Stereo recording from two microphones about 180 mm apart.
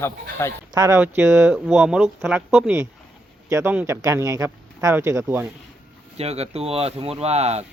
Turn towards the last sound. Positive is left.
turn(degrees=-35)  # may be behind; listen again after turning